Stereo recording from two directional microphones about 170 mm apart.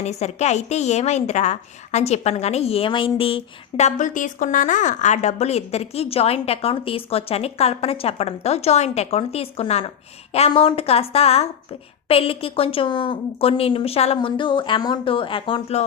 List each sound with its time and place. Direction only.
0.0 s a woman's voice: 40° left (ahead or behind)